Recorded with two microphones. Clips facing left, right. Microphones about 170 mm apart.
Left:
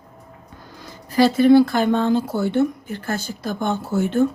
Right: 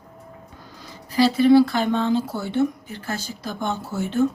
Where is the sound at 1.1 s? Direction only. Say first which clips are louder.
Left 2 dB; 50° left (ahead or behind).